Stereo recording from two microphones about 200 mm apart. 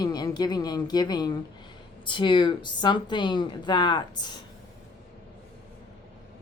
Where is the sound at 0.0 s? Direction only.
20° left (ahead or behind).